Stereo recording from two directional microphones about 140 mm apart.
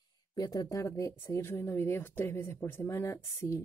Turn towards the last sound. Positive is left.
turn(degrees=20)  # may be behind; listen again after turning